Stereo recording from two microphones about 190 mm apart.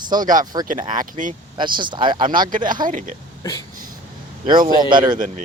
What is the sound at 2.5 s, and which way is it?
Speech, 45° right (ahead or behind).